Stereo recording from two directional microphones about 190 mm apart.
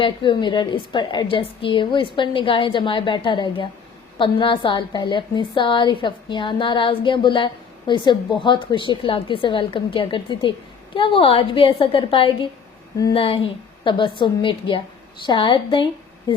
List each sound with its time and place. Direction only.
0.0 s a woman's voice: 25° left (ahead or behind)